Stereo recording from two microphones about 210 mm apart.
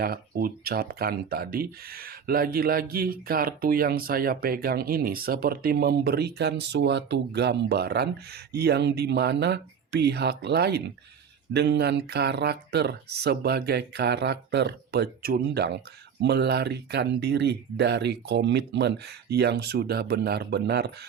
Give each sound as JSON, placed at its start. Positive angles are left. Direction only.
{"t": 0.0, "sound": "speech", "side_deg": -45}